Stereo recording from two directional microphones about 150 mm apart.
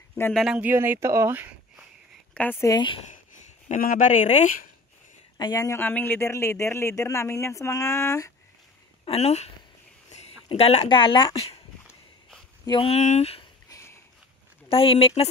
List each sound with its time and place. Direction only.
0.3 s speech: centre (ahead or behind)
0.7 s speech: 15° right (ahead or behind)
2.3 s speech: 15° left (ahead or behind)
3.6 s speech: 60° left (ahead or behind)
5.4 s a man's voice: 20° left (ahead or behind)
9.0 s speech: 45° left (ahead or behind)
12.6 s speech: 35° left (ahead or behind)
13.7 s a sound: 20° left (ahead or behind)
14.7 s speech: 40° left (ahead or behind)